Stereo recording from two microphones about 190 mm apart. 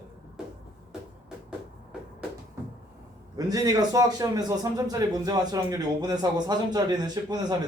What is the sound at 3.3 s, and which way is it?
A man's voice, 20° right (ahead or behind).